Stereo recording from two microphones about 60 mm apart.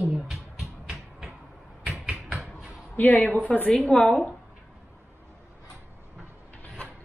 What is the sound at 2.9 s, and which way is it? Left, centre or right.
Speech, left.